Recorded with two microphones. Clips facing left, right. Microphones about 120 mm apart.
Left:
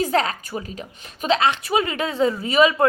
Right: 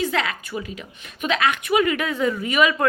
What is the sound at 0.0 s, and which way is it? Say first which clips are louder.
A woman's voice: left 3 dB; 40° left (ahead or behind).